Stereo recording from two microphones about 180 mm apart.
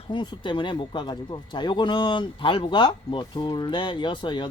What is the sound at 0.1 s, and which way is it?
Speech, 25° left (ahead or behind).